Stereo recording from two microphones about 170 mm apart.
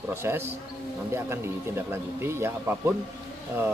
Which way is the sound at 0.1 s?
15° right (ahead or behind).